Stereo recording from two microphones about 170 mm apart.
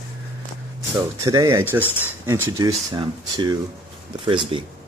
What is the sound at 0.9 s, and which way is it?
Speech, 20° right (ahead or behind).